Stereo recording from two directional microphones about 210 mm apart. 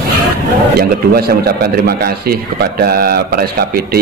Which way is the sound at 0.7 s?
45° right (ahead or behind).